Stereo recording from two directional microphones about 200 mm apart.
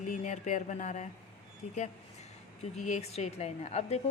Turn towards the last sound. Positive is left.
turn(degrees=35)  # may be behind; listen again after turning